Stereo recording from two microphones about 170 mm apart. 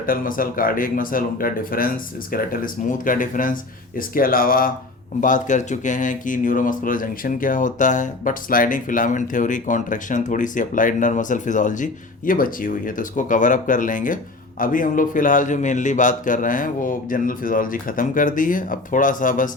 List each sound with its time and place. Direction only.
0.0 s speech: 55° left (ahead or behind)